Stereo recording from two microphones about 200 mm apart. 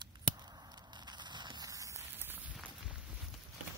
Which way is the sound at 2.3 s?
5° right (ahead or behind).